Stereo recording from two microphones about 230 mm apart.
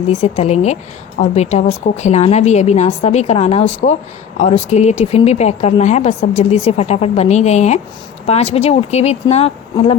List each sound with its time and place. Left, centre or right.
0.1 s speech: left